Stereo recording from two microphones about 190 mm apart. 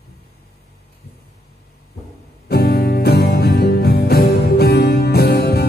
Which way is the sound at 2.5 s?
55° left (ahead or behind).